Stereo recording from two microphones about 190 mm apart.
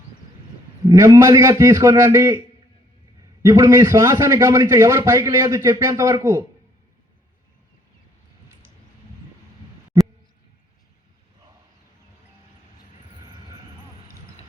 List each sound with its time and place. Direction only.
0.9 s a man's voice: 15° right (ahead or behind)
3.4 s a man's voice: 15° right (ahead or behind)